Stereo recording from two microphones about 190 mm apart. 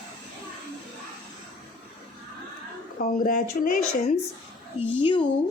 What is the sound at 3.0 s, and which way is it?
Speech, 45° left (ahead or behind).